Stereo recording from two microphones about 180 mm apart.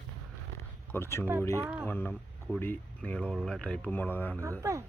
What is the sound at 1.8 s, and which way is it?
Speech, 10° left (ahead or behind).